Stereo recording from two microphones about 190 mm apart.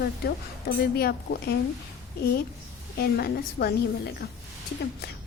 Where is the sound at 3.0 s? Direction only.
55° left (ahead or behind).